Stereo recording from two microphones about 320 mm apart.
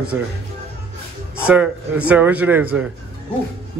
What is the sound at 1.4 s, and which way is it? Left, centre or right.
A man's voice, centre.